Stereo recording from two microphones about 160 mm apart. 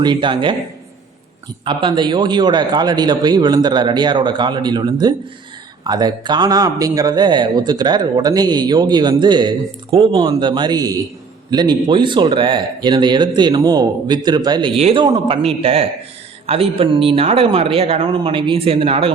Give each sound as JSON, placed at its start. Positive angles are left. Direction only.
{"t": 0.0, "sound": "speech", "side_deg": -30}
{"t": 1.6, "sound": "a man's voice", "side_deg": -30}
{"t": 14.8, "sound": "speech", "side_deg": -40}
{"t": 15.0, "sound": "a man's voice", "side_deg": -30}
{"t": 15.4, "sound": "speech", "side_deg": -40}